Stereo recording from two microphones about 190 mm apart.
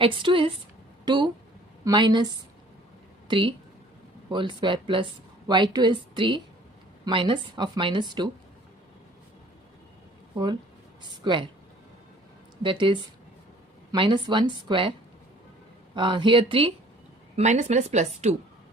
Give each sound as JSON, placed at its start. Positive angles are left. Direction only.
{"t": 0.0, "sound": "speech", "side_deg": -25}
{"t": 10.3, "sound": "speech", "side_deg": -20}
{"t": 12.6, "sound": "speech", "side_deg": -25}
{"t": 16.0, "sound": "speech", "side_deg": -25}
{"t": 17.3, "sound": "a woman's voice", "side_deg": -40}